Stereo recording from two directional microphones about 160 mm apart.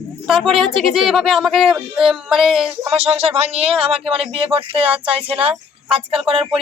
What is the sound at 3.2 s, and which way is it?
Speech, 40° right (ahead or behind).